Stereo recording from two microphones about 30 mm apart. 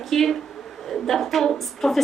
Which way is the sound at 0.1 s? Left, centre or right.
Centre.